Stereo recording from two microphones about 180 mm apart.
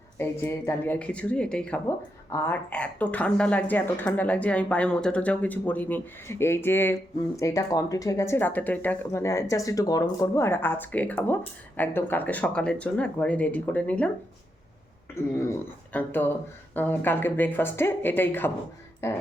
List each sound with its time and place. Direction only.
0.2 s speech: 10° left (ahead or behind)
15.4 s speech: 15° left (ahead or behind)